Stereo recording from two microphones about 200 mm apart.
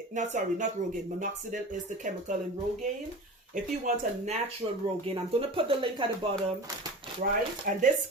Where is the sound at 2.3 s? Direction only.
35° right (ahead or behind).